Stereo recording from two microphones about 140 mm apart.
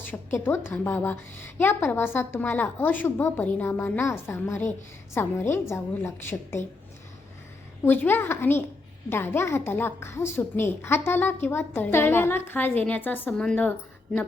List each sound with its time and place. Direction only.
0.0 s a woman's voice: 15° left (ahead or behind)
7.9 s a woman's voice: 15° left (ahead or behind)